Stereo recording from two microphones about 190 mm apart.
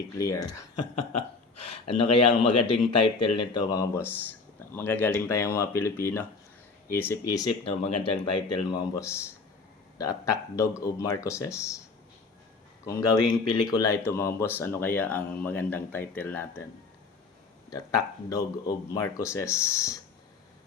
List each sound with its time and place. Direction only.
0.2 s speech: 15° left (ahead or behind)
1.6 s speech: 25° left (ahead or behind)
9.0 s speech: 15° left (ahead or behind)
12.8 s speech: 15° left (ahead or behind)
17.7 s speech: 20° left (ahead or behind)